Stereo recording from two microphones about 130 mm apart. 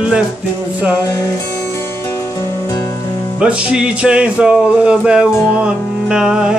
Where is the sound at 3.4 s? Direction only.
5° right (ahead or behind).